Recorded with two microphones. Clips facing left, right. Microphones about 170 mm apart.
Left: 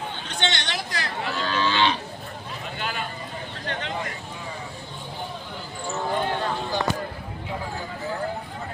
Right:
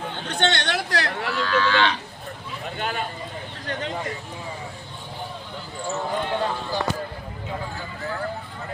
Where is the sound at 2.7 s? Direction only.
45° right (ahead or behind).